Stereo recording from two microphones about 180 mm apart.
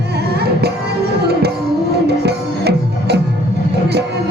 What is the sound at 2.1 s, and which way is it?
Music, 65° right (ahead or behind).